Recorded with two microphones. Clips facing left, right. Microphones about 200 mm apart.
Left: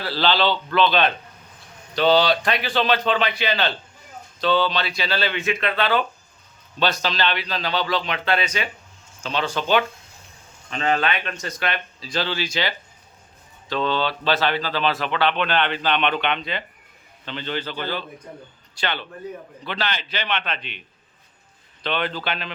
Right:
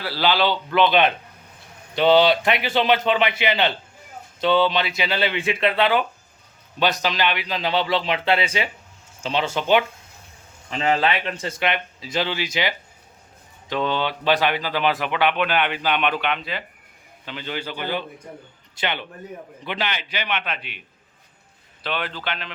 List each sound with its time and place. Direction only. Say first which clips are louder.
0.0 s a man's voice: even; 10° right (ahead or behind)
21.8 s speech: left 3 dB; 5° right (ahead or behind)
22.1 s speech: left 2 dB; 35° left (ahead or behind)